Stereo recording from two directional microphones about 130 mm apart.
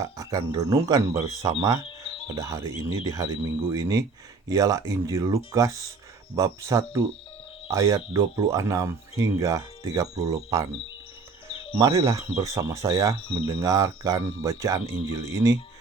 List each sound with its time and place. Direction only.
0.0 s speech: 25° right (ahead or behind)
1.8 s a sound: 45° left (ahead or behind)
2.3 s speech: 25° right (ahead or behind)
11.4 s music: 45° left (ahead or behind)
11.8 s speech: 25° right (ahead or behind)